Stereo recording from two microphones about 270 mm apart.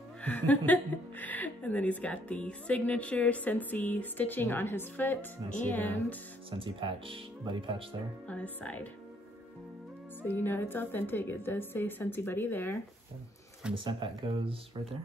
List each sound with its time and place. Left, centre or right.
0.2 s a woman's voice: centre
6.6 s speech: centre
8.3 s a woman's voice: centre
10.2 s a woman's voice: centre
13.7 s speech: centre